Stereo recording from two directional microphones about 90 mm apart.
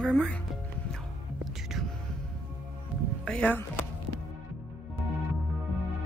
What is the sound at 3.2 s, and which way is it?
Speech, 15° left (ahead or behind).